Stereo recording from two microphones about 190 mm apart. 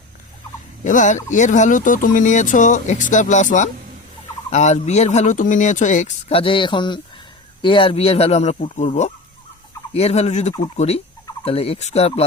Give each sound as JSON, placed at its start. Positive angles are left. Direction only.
{"t": 0.9, "sound": "speech", "side_deg": 40}